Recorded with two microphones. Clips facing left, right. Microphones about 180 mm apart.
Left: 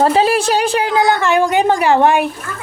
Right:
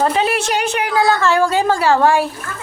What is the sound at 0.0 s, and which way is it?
Speech, 35° left (ahead or behind).